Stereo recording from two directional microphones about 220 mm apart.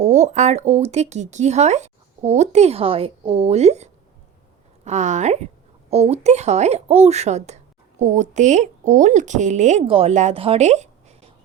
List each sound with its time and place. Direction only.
0.0 s speech: 30° right (ahead or behind)